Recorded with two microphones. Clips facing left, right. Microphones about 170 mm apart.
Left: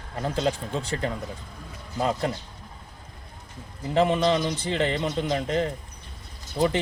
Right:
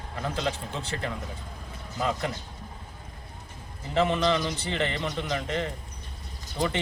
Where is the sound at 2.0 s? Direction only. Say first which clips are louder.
Left 3 dB; 35° left (ahead or behind).